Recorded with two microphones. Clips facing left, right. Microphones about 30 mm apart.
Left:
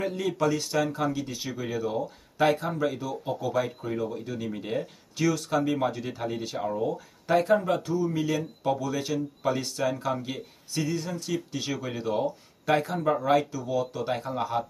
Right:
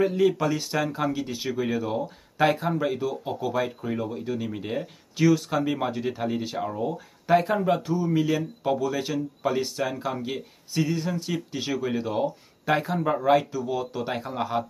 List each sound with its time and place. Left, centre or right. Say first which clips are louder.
0.0 s speech: right 5 dB; centre